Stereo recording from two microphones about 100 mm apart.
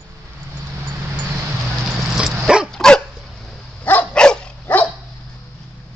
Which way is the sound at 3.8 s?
15° left (ahead or behind).